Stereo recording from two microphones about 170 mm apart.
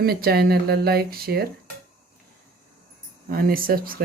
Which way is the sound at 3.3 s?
60° right (ahead or behind).